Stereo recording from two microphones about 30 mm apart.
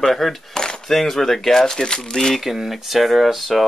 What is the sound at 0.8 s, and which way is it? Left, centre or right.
Speech, centre.